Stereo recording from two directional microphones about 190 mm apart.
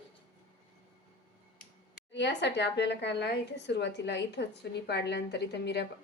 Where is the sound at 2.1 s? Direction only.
65° left (ahead or behind).